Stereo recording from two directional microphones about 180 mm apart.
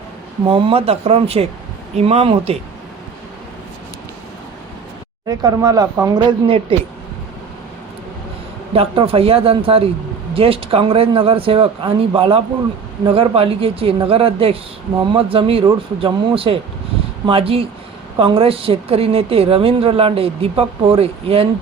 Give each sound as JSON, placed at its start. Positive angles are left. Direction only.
{"t": 0.4, "sound": "speech", "side_deg": -30}
{"t": 5.4, "sound": "speech", "side_deg": -20}
{"t": 8.7, "sound": "speech", "side_deg": -30}